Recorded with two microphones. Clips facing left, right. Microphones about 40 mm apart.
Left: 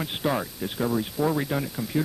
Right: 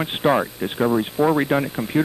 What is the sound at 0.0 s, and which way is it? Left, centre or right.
Speech, right.